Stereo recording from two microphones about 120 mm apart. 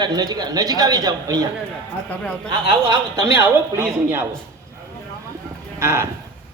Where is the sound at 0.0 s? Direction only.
35° right (ahead or behind).